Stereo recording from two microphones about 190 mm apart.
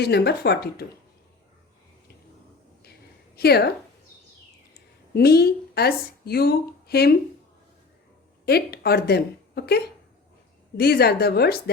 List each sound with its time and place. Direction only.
0.0 s a woman's voice: 60° left (ahead or behind)
3.3 s a woman's voice: 60° left (ahead or behind)
5.1 s a woman's voice: 55° left (ahead or behind)
8.4 s a woman's voice: 55° left (ahead or behind)